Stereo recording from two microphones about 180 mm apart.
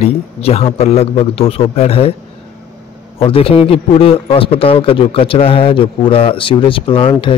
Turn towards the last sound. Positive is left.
turn(degrees=30)  # may be behind; listen again after turning